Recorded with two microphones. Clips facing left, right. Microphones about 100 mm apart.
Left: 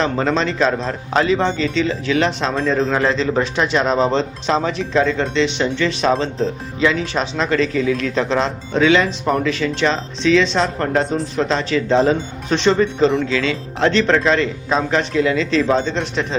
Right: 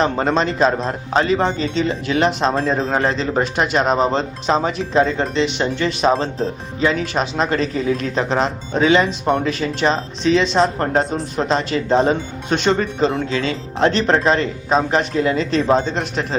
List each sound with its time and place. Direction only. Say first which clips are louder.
0.0 s speech: right 1 dB; 40° right (ahead or behind)
9.5 s speech: even; 40° right (ahead or behind)